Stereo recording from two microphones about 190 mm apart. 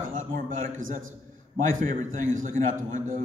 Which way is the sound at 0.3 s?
45° right (ahead or behind).